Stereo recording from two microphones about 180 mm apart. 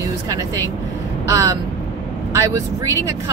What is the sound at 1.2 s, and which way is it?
Speech, 20° right (ahead or behind).